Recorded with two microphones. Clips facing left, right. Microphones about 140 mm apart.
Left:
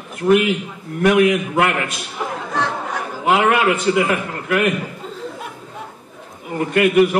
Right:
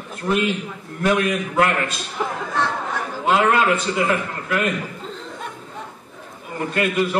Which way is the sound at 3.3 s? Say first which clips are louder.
Left 2 dB; 70° left (ahead or behind).